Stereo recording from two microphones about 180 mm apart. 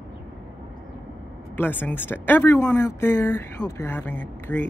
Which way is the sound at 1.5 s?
10° left (ahead or behind).